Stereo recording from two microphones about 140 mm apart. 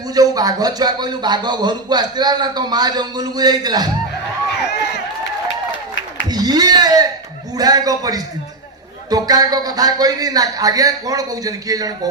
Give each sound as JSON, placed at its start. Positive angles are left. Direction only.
{"t": 0.1, "sound": "speech", "side_deg": -25}
{"t": 6.3, "sound": "speech", "side_deg": -30}